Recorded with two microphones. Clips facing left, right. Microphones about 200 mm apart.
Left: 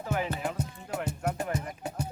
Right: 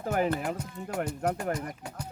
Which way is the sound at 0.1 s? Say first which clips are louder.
Right 4 dB; 50° right (ahead or behind).